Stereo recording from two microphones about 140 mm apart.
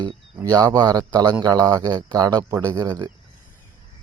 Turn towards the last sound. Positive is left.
turn(degrees=-30)  # may be behind; listen again after turning